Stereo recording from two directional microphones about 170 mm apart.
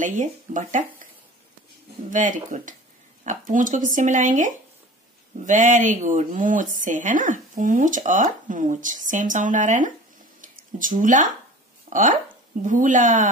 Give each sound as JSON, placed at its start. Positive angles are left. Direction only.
{"t": 0.0, "sound": "speech", "side_deg": -45}
{"t": 2.1, "sound": "speech", "side_deg": -50}